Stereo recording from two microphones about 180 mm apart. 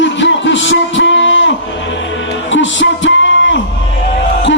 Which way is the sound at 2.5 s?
90° left.